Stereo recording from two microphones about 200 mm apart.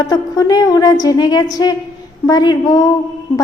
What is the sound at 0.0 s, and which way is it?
A woman's voice, 20° left (ahead or behind).